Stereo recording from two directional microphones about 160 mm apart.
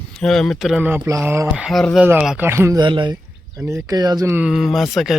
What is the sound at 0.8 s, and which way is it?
Speech, 10° right (ahead or behind).